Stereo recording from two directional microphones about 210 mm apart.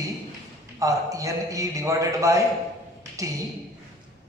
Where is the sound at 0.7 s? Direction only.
15° right (ahead or behind).